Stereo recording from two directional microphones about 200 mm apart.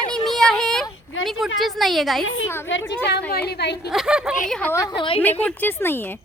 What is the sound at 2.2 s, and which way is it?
Speech, 80° left.